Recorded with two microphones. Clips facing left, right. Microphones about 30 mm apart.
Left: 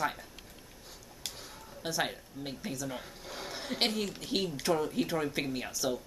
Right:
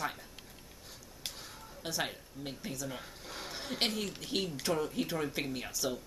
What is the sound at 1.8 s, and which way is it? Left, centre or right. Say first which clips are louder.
Speech: left 3 dB; centre.